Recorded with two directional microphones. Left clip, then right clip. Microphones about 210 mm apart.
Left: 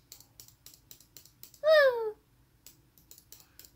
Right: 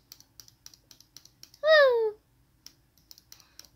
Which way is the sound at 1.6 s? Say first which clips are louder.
Right 3 dB; 20° right (ahead or behind).